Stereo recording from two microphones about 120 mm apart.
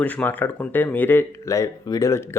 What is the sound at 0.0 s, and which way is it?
Speech, 10° left (ahead or behind).